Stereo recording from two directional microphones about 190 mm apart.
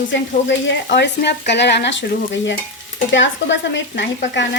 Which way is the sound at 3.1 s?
75° left (ahead or behind).